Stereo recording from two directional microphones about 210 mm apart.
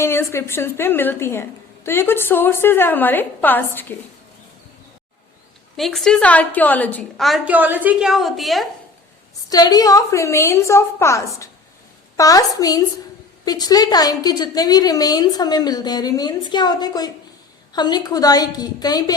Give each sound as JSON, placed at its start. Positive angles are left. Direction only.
{"t": 0.0, "sound": "a woman's voice", "side_deg": 10}
{"t": 5.7, "sound": "a woman's voice", "side_deg": 0}
{"t": 9.5, "sound": "a woman's voice", "side_deg": 20}